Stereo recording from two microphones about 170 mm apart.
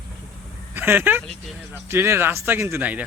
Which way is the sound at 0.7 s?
10° right (ahead or behind).